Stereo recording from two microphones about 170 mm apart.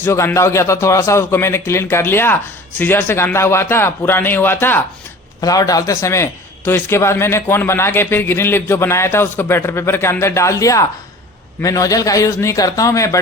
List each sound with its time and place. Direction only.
0.0 s a man's voice: 15° left (ahead or behind)